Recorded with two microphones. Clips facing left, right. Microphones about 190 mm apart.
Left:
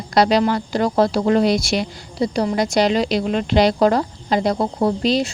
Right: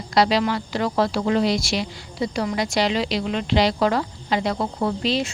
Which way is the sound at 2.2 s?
35° left (ahead or behind).